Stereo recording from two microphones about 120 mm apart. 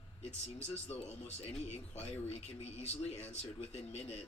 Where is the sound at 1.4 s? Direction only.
60° left (ahead or behind).